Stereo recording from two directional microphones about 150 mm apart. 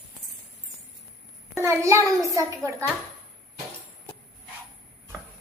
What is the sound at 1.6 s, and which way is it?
A woman's voice, 20° right (ahead or behind).